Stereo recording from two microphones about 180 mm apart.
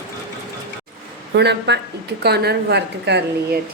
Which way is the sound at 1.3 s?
70° right (ahead or behind).